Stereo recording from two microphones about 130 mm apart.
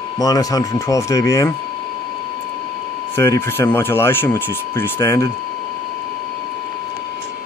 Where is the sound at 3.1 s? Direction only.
20° left (ahead or behind).